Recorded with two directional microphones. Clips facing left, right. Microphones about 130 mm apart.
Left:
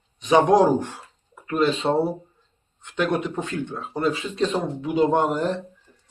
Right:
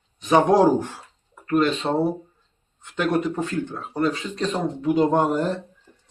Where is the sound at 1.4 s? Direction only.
5° left (ahead or behind).